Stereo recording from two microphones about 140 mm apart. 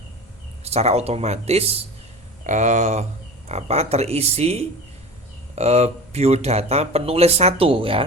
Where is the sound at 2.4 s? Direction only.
60° right (ahead or behind).